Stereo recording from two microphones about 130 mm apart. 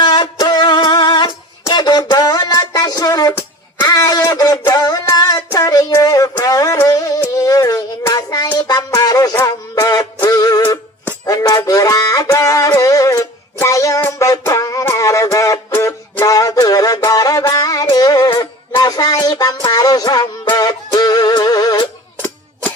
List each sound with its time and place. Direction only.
0.0 s music: 35° left (ahead or behind)
1.7 s a sound: 35° left (ahead or behind)
5.1 s music: 30° left (ahead or behind)
7.3 s child singing: 25° left (ahead or behind)
8.5 s music: 30° left (ahead or behind)
11.3 s a sound: 30° left (ahead or behind)
17.9 s music: 30° left (ahead or behind)